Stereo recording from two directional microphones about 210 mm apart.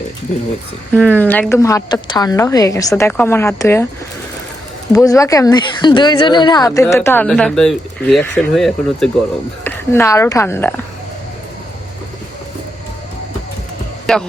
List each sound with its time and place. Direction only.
0.9 s speech: 5° left (ahead or behind)
5.0 s speech: 15° left (ahead or behind)
9.6 s speech: 15° left (ahead or behind)
14.1 s speech: centre (ahead or behind)